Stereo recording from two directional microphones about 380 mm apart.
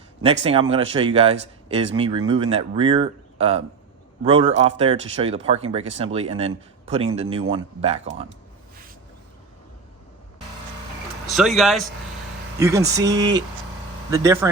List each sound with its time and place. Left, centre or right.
0.4 s speech: centre
11.3 s speech: centre